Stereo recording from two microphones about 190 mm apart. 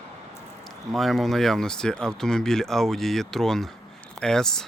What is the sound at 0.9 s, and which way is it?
Speech, centre (ahead or behind).